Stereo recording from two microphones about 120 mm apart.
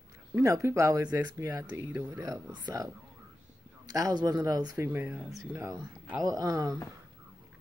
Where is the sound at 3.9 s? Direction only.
30° right (ahead or behind).